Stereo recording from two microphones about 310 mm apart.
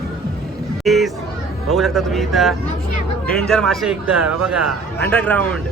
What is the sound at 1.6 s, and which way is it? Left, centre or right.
Speech, centre.